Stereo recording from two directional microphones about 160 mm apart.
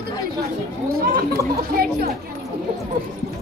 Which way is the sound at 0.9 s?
70° right (ahead or behind).